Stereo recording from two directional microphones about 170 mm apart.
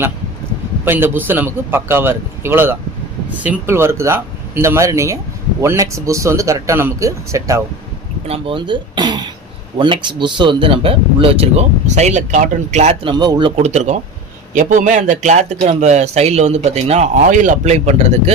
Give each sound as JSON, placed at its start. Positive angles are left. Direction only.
{"t": 0.9, "sound": "speech", "side_deg": -15}
{"t": 8.3, "sound": "speech", "side_deg": -30}
{"t": 13.1, "sound": "speech", "side_deg": -25}
{"t": 13.6, "sound": "a man's voice", "side_deg": -40}